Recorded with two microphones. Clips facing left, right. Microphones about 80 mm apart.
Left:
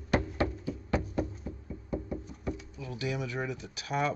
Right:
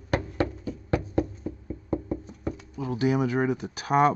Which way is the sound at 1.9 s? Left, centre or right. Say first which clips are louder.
Right 6 dB; right.